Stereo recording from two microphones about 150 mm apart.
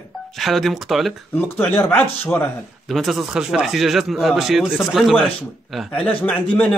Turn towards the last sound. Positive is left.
turn(degrees=10)  # may be behind; listen again after turning